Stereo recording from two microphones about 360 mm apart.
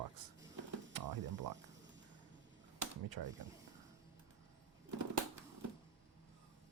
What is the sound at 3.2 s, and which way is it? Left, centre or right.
Speech, right.